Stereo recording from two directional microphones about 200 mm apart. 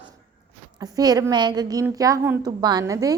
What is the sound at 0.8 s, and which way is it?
A woman's voice, 20° right (ahead or behind).